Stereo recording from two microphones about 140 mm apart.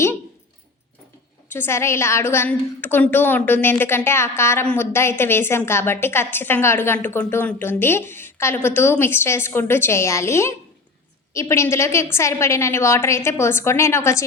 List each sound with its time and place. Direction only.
1.5 s a woman's voice: 15° left (ahead or behind)